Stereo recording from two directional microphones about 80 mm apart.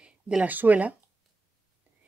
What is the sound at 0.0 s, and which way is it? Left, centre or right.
Speech, centre.